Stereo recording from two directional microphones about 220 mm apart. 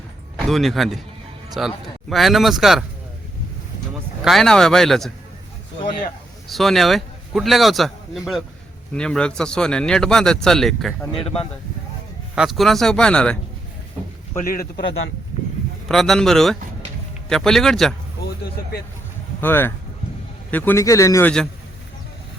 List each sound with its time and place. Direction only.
0.3 s a man's voice: centre (ahead or behind)
4.2 s a man's voice: centre (ahead or behind)
6.5 s a man's voice: centre (ahead or behind)
11.1 s speech: 25° left (ahead or behind)
12.3 s a man's voice: centre (ahead or behind)
14.3 s a man's voice: 40° left (ahead or behind)
15.9 s a man's voice: centre (ahead or behind)
19.4 s a man's voice: 10° left (ahead or behind)